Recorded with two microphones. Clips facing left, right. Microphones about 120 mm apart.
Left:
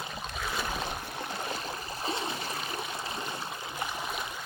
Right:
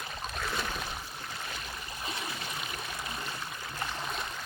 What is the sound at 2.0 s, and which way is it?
Stream, 25° left (ahead or behind).